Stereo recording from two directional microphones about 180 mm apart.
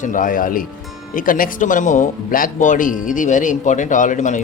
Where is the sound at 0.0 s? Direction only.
45° left (ahead or behind).